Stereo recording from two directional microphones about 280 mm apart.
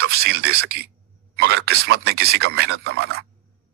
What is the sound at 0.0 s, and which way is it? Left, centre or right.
Speech, right.